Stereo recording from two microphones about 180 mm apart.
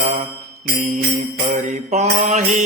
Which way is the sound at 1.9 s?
40° right (ahead or behind).